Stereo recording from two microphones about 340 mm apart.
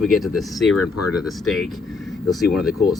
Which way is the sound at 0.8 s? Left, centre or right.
Left.